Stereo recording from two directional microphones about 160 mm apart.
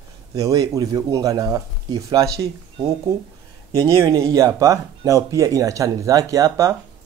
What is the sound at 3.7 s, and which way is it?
Speech, 20° right (ahead or behind).